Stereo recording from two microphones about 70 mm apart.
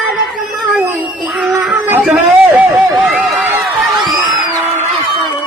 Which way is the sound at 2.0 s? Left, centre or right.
Centre.